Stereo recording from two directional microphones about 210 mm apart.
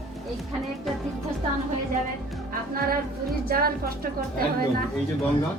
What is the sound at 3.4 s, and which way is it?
Speech, 45° right (ahead or behind).